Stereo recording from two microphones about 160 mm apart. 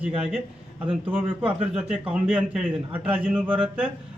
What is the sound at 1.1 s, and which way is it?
A man's voice, 10° right (ahead or behind).